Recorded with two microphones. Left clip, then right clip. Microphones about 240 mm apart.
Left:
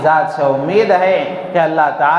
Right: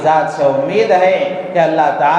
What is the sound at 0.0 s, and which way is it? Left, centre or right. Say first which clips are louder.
Speech: even; left.